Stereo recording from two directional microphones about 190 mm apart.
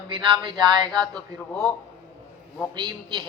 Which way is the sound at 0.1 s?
25° right (ahead or behind).